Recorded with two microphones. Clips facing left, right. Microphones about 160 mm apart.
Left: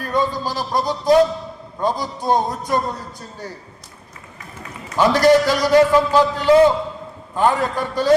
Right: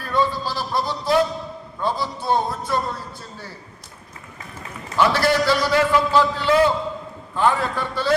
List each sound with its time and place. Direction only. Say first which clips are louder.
0.0 s a sound: left 1 dB; 45° left (ahead or behind)
0.5 s music: left 3 dB; 45° left (ahead or behind)
4.9 s a man's voice: left 5 dB; 45° left (ahead or behind)
6.5 s a man's voice: left 6 dB; 20° left (ahead or behind)
7.3 s a man's voice: left 2 dB; 40° left (ahead or behind)